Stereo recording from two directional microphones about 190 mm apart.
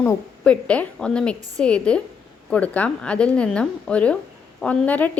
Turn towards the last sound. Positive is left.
turn(degrees=10)  # may be behind; listen again after turning